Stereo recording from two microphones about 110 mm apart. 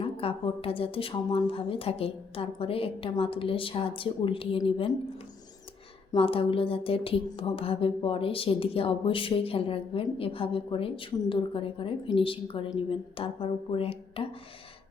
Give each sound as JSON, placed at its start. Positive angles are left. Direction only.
{"t": 0.0, "sound": "a woman's voice", "side_deg": 55}
{"t": 6.1, "sound": "speech", "side_deg": 60}